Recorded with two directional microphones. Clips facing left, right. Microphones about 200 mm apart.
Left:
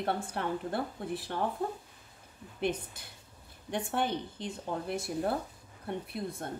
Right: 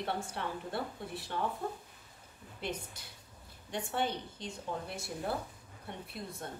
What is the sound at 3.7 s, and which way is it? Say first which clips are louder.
Speech: left 3 dB; 55° left (ahead or behind).